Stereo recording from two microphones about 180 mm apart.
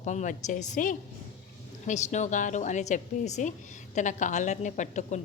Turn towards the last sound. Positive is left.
turn(degrees=40)  # may be behind; listen again after turning